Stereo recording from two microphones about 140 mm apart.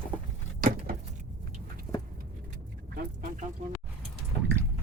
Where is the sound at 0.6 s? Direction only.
85° right.